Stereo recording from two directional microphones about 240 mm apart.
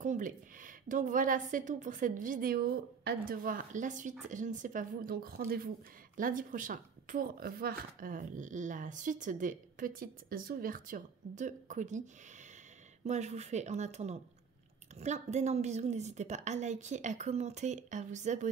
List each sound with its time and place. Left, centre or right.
0.0 s speech: right
13.0 s a woman's voice: right